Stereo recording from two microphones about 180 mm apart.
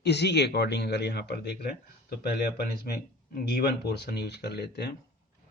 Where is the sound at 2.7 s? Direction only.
60° left (ahead or behind).